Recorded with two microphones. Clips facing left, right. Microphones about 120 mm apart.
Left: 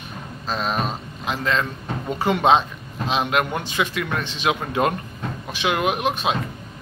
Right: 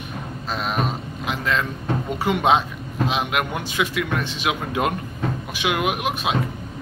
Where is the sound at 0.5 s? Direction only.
5° right (ahead or behind).